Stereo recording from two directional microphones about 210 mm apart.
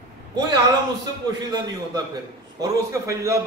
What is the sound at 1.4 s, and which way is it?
A man's voice, 20° right (ahead or behind).